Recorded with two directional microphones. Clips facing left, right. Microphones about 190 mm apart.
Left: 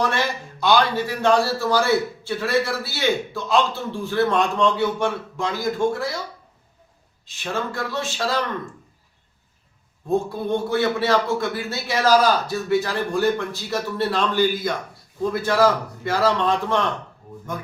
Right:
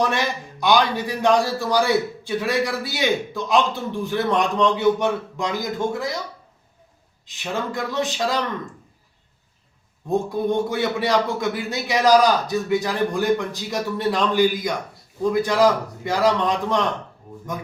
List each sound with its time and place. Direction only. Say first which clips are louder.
0.1 s a man's voice: even; 15° right (ahead or behind)
7.3 s a man's voice: even; 15° right (ahead or behind)
10.1 s a man's voice: even; 15° right (ahead or behind)